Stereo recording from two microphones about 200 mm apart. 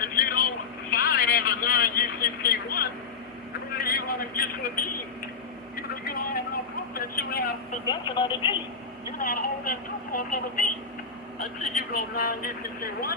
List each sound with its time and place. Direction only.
0.0 s vehicle: 45° left (ahead or behind)
5.7 s vehicle: 45° left (ahead or behind)
6.9 s a woman's voice: 50° left (ahead or behind)
7.9 s speech: 25° left (ahead or behind)
9.1 s a woman's voice: 45° left (ahead or behind)
11.7 s a woman's voice: 50° left (ahead or behind)